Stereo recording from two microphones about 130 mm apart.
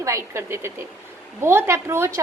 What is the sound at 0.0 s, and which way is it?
A woman's voice, 25° right (ahead or behind).